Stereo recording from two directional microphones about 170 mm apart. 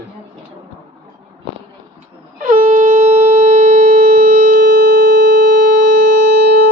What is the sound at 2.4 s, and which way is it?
Wind instrument, 50° right (ahead or behind).